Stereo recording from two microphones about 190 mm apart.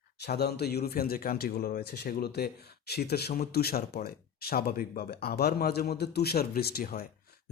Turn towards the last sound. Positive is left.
turn(degrees=55)  # may be behind; listen again after turning